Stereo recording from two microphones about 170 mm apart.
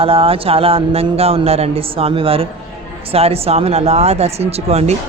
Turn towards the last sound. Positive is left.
turn(degrees=-40)  # may be behind; listen again after turning